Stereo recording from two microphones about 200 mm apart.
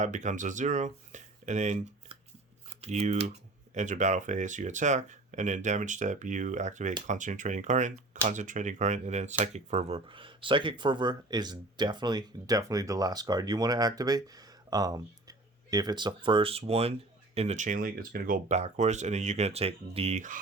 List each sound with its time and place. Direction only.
0.0 s speech: 35° right (ahead or behind)